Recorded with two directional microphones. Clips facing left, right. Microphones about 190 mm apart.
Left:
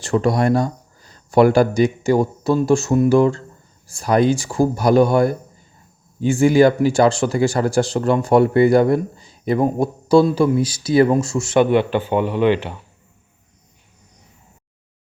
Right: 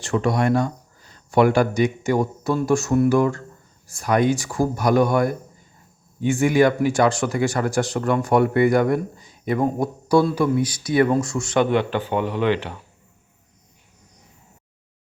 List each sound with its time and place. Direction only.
0.0 s speech: 35° left (ahead or behind); by 12.7 s 15° left (ahead or behind)